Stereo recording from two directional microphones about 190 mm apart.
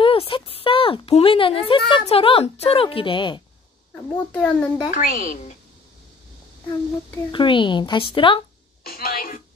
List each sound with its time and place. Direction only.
0.0 s speech: 30° left (ahead or behind)
4.1 s a child's voice: 10° left (ahead or behind)
5.1 s a woman's voice: 45° left (ahead or behind)
7.2 s a woman's voice: 25° left (ahead or behind)
8.8 s a woman's voice: 50° left (ahead or behind)